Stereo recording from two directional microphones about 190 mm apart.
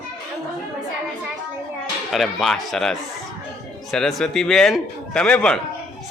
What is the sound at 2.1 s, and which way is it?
A man's voice, centre (ahead or behind).